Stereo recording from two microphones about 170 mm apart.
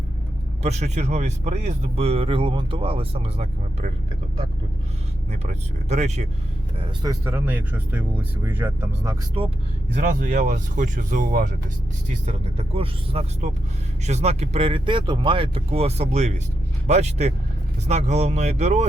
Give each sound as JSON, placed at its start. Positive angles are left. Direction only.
{"t": 0.6, "sound": "speech", "side_deg": -40}
{"t": 5.3, "sound": "speech", "side_deg": -40}
{"t": 6.7, "sound": "speech", "side_deg": -25}
{"t": 7.3, "sound": "speech", "side_deg": -10}
{"t": 10.0, "sound": "speech", "side_deg": -50}
{"t": 12.2, "sound": "speech", "side_deg": -40}